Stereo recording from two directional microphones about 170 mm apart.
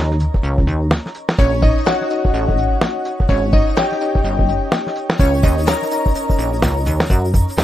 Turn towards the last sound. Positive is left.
turn(degrees=0)  # may be behind; listen again after turning